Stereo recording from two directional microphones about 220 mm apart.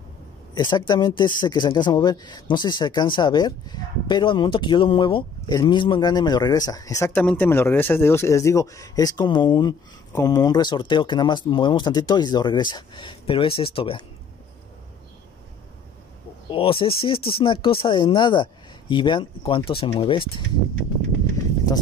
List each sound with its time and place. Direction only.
0.6 s speech: 20° left (ahead or behind)
16.4 s speech: 25° left (ahead or behind)